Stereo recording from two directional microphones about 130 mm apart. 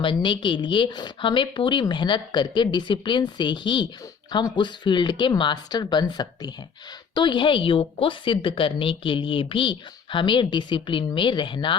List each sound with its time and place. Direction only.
0.0 s a woman's voice: 40° left (ahead or behind)